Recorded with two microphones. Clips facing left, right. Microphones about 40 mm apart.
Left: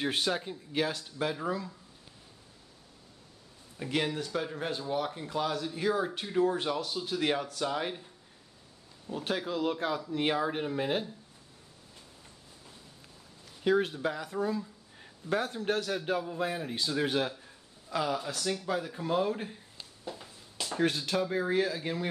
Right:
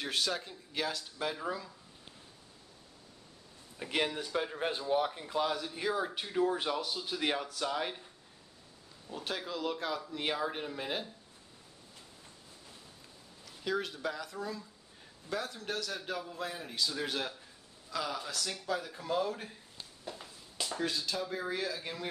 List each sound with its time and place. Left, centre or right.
0.0 s speech: left; by 1.7 s centre
3.7 s speech: centre
9.1 s speech: centre
13.7 s speech: left
15.2 s a man's voice: left
16.2 s speech: centre
20.1 s walk: centre
20.7 s speech: left
21.3 s speech: left